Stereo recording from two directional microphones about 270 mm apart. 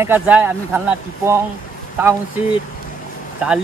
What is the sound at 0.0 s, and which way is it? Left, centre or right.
Speech, centre.